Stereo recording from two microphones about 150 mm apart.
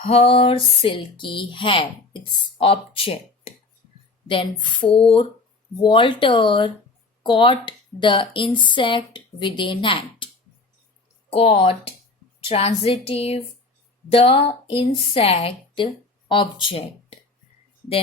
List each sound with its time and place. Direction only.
0.0 s speech: 40° left (ahead or behind)
11.3 s speech: 40° left (ahead or behind)